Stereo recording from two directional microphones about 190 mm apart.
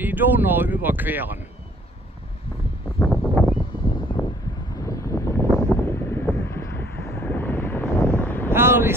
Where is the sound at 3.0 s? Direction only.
5° left (ahead or behind).